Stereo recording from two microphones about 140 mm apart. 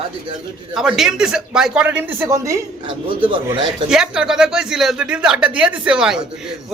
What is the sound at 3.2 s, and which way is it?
Speech, 35° right (ahead or behind).